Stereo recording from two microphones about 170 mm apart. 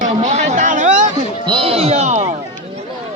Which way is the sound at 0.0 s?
40° right (ahead or behind).